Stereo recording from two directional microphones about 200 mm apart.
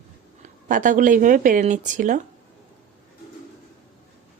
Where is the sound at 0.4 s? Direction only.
40° right (ahead or behind).